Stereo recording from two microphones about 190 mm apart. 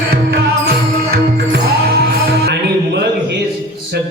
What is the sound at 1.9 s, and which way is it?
Music, 55° right (ahead or behind).